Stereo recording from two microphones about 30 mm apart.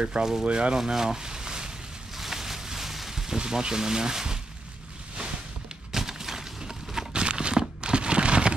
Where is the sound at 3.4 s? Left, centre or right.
Right.